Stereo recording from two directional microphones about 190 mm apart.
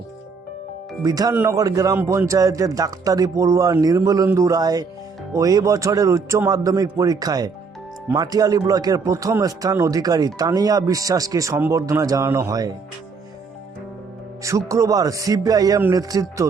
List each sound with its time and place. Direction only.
1.0 s a man's voice: 20° right (ahead or behind)
14.4 s speech: 15° right (ahead or behind)
16.4 s music: 20° right (ahead or behind)